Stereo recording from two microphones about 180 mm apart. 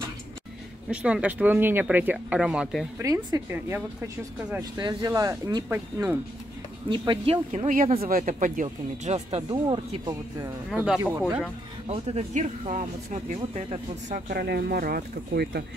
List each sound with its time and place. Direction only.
0.8 s speech: 5° right (ahead or behind)
3.0 s speech: 20° right (ahead or behind)
4.7 s speech: 25° right (ahead or behind)
6.9 s speech: 25° right (ahead or behind)
7.5 s speech: 45° right (ahead or behind); by 10.5 s 25° right (ahead or behind)
10.7 s speech: 5° right (ahead or behind)
11.0 s speech: 15° right (ahead or behind)
11.9 s speech: 35° right (ahead or behind); by 15.6 s 60° right (ahead or behind)